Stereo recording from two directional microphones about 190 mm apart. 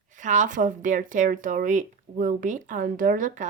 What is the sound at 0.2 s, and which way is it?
Speech, 40° right (ahead or behind).